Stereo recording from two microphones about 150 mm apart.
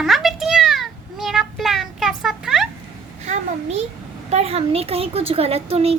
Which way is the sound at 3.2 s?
50° right (ahead or behind).